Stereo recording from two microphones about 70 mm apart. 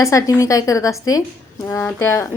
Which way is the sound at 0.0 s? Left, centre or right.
Left.